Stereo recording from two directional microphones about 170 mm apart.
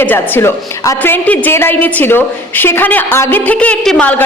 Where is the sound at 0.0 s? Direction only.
10° left (ahead or behind).